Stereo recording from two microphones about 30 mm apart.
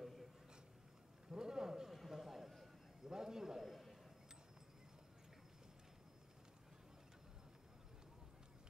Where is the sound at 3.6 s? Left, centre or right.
Centre.